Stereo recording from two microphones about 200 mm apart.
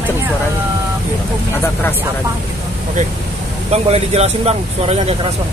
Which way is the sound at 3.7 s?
30° right (ahead or behind).